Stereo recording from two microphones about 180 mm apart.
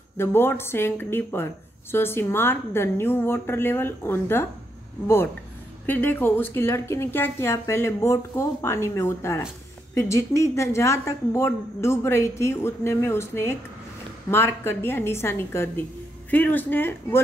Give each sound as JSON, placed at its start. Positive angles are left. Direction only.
{"t": 0.2, "sound": "a woman's voice", "side_deg": 15}